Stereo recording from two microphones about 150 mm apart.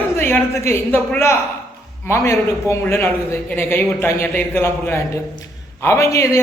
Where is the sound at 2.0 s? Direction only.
20° left (ahead or behind).